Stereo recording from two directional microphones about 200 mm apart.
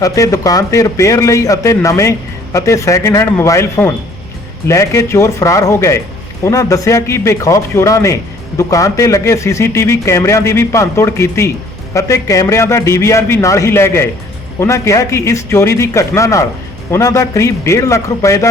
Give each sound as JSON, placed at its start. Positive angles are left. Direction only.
{"t": 0.0, "sound": "a man's voice", "side_deg": 15}